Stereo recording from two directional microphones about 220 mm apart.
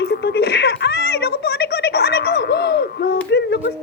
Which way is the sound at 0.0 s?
50° left (ahead or behind).